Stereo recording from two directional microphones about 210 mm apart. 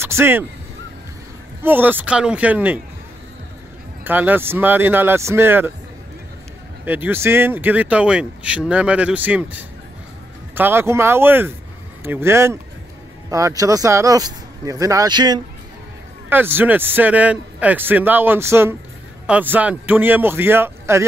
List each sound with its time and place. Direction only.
0.0 s speech: 10° right (ahead or behind)
1.6 s speech: 10° right (ahead or behind)
4.0 s speech: 10° right (ahead or behind)
6.8 s speech: 10° right (ahead or behind)